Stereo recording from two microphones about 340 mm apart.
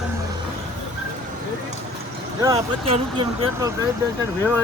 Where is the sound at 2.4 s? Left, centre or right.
Centre.